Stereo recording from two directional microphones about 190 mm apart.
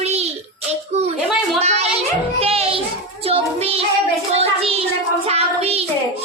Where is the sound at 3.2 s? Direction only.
30° right (ahead or behind).